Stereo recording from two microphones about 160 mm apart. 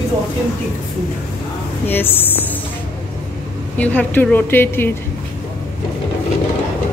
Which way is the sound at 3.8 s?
10° left (ahead or behind).